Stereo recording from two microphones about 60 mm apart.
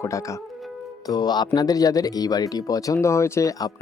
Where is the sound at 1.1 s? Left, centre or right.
Left.